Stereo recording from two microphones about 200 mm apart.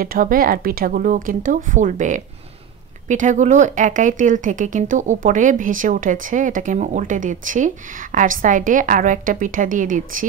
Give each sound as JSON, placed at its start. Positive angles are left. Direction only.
{"t": 0.0, "sound": "speech", "side_deg": -45}